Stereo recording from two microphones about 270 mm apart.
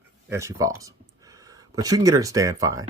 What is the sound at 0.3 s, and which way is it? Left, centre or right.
Speech, centre.